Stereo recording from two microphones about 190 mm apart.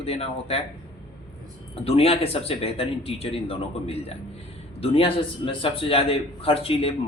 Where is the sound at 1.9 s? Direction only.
30° left (ahead or behind).